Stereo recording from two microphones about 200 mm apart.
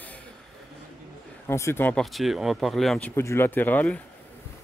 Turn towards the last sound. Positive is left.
turn(degrees=5)  # may be behind; listen again after turning